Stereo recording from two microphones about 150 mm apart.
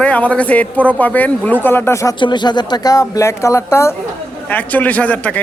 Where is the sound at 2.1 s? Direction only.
30° left (ahead or behind).